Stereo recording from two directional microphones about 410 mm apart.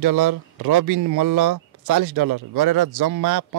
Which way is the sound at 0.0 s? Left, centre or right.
Right.